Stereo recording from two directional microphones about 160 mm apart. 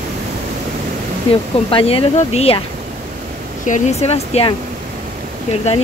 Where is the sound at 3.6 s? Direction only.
50° left (ahead or behind).